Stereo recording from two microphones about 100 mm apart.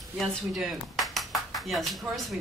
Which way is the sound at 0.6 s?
Centre (ahead or behind).